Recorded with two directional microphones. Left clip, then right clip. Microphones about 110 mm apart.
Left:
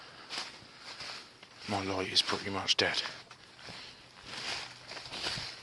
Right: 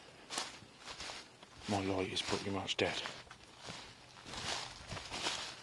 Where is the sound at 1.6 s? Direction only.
20° right (ahead or behind).